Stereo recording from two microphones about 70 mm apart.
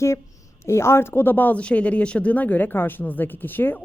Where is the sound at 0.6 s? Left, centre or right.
Left.